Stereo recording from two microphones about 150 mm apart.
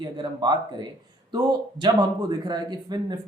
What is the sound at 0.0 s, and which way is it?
Speech, 30° right (ahead or behind).